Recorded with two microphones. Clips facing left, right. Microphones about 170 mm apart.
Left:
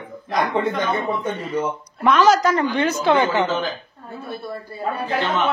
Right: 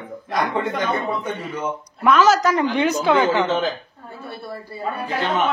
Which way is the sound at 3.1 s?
10° left (ahead or behind).